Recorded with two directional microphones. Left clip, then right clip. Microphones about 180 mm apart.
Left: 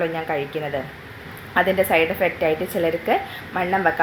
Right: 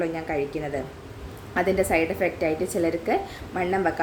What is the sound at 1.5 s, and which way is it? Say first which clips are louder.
A woman's voice: left 5 dB; 15° right (ahead or behind).